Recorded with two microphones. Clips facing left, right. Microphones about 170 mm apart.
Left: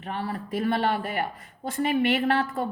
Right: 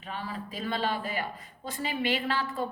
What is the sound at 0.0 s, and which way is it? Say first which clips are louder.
A woman's voice: left 5 dB; 60° left (ahead or behind).